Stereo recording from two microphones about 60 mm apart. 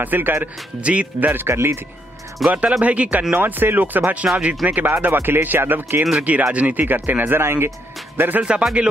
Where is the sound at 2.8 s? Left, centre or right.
Right.